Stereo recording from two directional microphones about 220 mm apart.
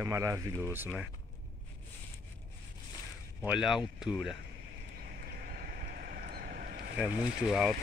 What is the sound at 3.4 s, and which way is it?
Speech, 5° right (ahead or behind).